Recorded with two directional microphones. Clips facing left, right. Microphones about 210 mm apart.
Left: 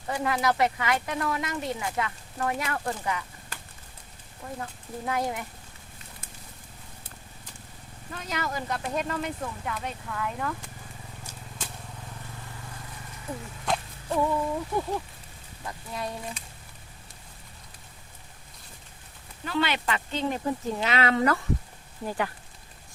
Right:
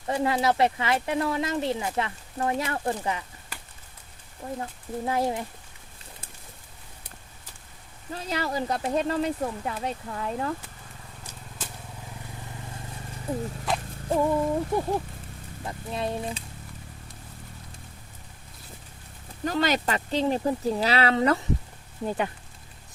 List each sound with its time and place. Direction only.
0.1 s speech: 30° right (ahead or behind)
4.6 s speech: 30° right (ahead or behind)
8.1 s speech: 30° right (ahead or behind)
13.7 s a sound: 5° right (ahead or behind)
14.1 s speech: 30° right (ahead or behind)
19.5 s speech: 40° right (ahead or behind); by 22.3 s 20° right (ahead or behind)